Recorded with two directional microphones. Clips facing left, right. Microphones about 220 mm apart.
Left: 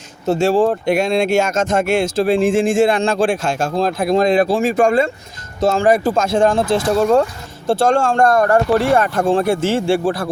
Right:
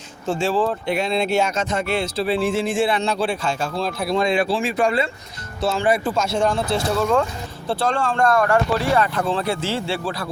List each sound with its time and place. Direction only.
0.3 s speech: 45° left (ahead or behind)